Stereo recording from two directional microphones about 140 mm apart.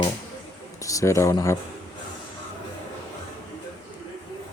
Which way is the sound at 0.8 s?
25° left (ahead or behind).